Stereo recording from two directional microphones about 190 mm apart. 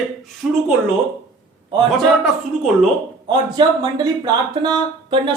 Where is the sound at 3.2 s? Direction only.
20° right (ahead or behind).